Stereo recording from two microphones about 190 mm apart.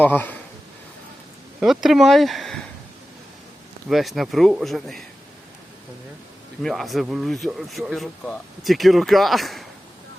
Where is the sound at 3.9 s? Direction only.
Centre (ahead or behind).